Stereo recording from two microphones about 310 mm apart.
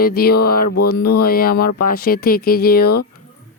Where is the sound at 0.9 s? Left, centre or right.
Left.